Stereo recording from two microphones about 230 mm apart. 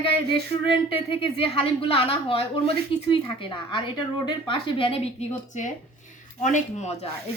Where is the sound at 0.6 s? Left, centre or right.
Left.